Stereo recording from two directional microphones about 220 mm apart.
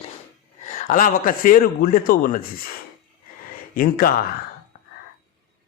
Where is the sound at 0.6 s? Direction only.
35° left (ahead or behind).